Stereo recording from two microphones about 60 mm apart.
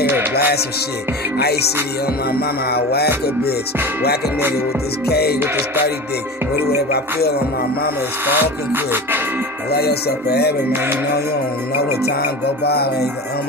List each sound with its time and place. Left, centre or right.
0.0 s music: right
8.3 s music: right